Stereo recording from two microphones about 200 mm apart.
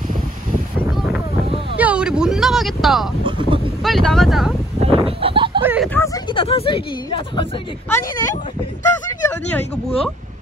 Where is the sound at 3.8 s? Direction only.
Centre (ahead or behind).